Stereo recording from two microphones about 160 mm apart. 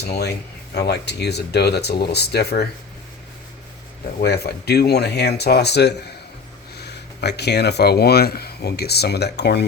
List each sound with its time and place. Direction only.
0.1 s speech: 90° left
4.2 s speech: 90° left